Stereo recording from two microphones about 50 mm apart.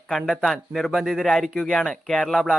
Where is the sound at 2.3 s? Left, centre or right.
Centre.